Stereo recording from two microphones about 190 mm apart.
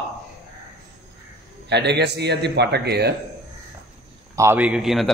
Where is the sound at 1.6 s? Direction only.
65° right (ahead or behind).